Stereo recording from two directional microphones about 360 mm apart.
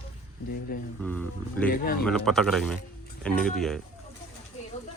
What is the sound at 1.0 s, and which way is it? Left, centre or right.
Speech, centre.